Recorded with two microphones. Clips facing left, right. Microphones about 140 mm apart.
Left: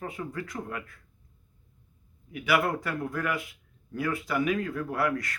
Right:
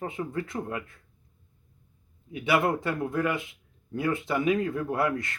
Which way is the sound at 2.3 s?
25° right (ahead or behind).